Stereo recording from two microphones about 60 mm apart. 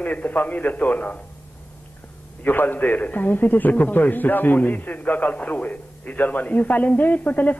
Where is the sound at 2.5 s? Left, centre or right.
Left.